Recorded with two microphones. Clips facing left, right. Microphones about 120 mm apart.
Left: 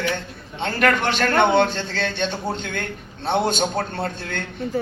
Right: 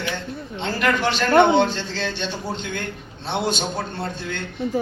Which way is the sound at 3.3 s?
50° left (ahead or behind).